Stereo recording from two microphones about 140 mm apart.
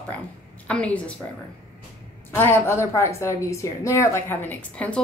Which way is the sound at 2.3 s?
15° left (ahead or behind).